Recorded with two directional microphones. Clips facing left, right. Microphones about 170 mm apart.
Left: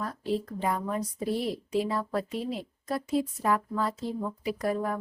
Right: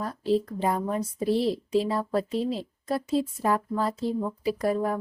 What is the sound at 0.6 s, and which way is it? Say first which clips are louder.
Speech: right 3 dB; 30° right (ahead or behind).